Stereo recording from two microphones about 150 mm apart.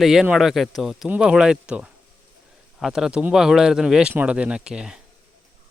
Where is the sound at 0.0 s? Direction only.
5° right (ahead or behind).